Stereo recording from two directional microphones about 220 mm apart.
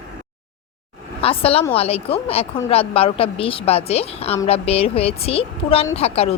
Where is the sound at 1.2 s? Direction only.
25° left (ahead or behind).